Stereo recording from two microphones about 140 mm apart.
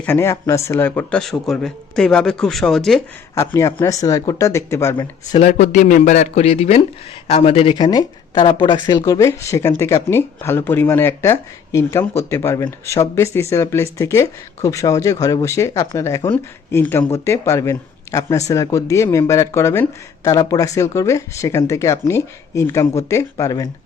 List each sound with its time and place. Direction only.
0.0 s speech: 15° left (ahead or behind)
3.3 s speech: 20° left (ahead or behind)
5.4 s speech: 55° left (ahead or behind); by 23.6 s 25° left (ahead or behind)